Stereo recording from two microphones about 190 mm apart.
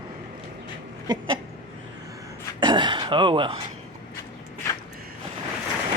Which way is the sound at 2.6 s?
25° right (ahead or behind).